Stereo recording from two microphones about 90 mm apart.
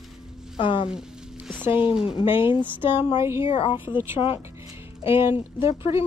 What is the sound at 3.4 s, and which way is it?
Speech, 70° left (ahead or behind).